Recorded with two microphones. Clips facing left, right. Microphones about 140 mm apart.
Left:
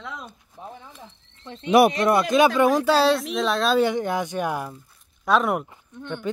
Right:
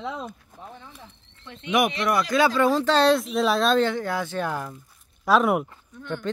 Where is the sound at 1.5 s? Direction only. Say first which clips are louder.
Left 6 dB; 35° left (ahead or behind).